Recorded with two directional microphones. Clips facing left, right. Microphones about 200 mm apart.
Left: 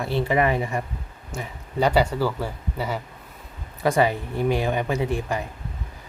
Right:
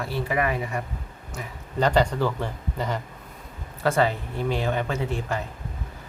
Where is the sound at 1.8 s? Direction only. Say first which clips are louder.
Left 1 dB; 10° left (ahead or behind).